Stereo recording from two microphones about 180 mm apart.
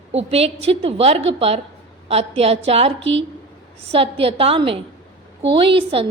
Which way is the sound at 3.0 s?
90° right.